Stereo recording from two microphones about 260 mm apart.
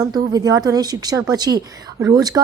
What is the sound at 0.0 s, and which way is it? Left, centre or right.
A woman's voice, centre.